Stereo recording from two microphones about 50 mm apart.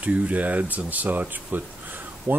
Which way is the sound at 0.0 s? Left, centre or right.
Right.